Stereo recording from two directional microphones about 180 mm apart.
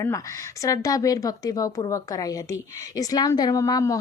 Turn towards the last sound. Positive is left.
turn(degrees=20)  # may be behind; listen again after turning